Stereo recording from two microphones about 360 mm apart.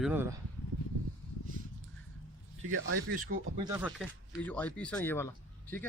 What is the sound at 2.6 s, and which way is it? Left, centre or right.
Speech, right.